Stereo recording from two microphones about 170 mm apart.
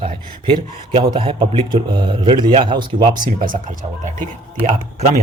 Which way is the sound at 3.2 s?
55° right (ahead or behind).